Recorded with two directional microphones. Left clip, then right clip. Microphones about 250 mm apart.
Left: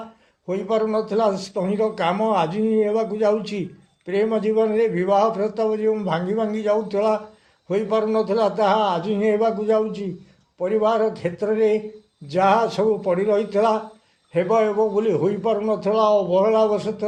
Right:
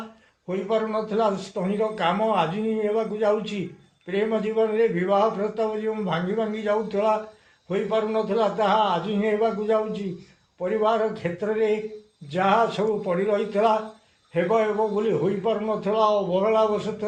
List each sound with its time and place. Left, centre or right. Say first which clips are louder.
0.4 s a man's voice: left 3 dB; left